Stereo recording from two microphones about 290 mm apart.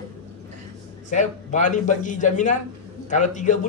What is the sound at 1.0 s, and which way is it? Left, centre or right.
A man's voice, left.